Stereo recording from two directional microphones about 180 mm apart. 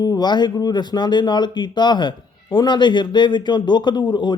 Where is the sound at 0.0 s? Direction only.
20° left (ahead or behind).